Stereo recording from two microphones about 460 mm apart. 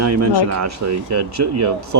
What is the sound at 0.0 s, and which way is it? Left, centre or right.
Speech, right.